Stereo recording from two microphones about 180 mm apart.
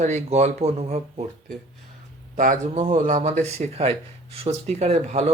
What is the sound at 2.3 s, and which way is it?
Speech, 45° right (ahead or behind).